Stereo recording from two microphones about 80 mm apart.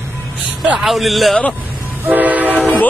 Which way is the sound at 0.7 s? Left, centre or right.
Centre.